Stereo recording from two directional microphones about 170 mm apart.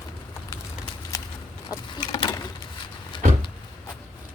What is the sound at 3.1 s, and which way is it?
Vehicle, 30° left (ahead or behind).